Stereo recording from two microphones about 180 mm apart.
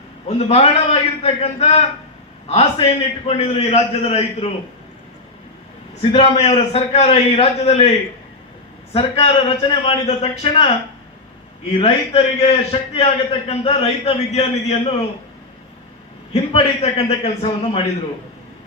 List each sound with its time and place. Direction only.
0.3 s a man's voice: 35° left (ahead or behind)
6.0 s a man's voice: 35° left (ahead or behind)
11.7 s a man's voice: 30° left (ahead or behind)
16.3 s a man's voice: 35° left (ahead or behind)